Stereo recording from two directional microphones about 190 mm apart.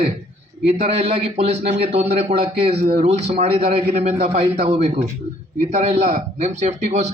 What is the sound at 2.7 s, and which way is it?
Speech, 55° right (ahead or behind).